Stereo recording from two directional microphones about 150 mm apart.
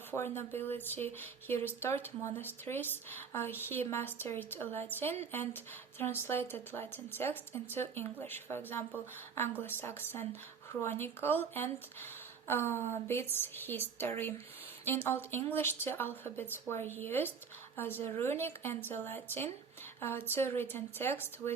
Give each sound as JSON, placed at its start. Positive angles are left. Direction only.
{"t": 0.1, "sound": "speech", "side_deg": 15}